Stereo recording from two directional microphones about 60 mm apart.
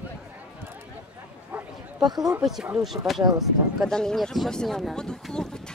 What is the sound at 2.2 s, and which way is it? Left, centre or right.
Speech, centre.